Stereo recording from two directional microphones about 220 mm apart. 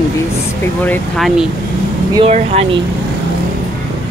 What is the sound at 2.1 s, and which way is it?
Speech, 25° right (ahead or behind).